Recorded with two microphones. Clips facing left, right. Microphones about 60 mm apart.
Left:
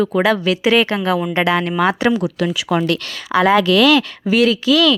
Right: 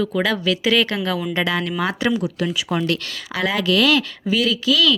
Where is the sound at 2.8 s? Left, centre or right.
Left.